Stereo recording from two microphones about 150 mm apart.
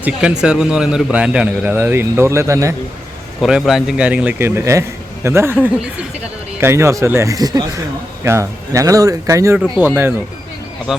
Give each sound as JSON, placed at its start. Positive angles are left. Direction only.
{"t": 0.0, "sound": "a man's voice", "side_deg": -5}
{"t": 3.4, "sound": "a man's voice", "side_deg": -5}
{"t": 9.6, "sound": "a man's voice", "side_deg": -10}
{"t": 10.9, "sound": "speech", "side_deg": -5}